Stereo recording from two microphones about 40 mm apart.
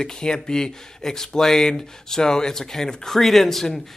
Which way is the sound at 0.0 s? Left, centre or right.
Centre.